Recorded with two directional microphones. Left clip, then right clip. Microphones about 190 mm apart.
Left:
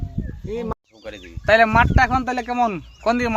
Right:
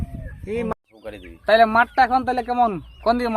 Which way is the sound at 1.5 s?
15° left (ahead or behind).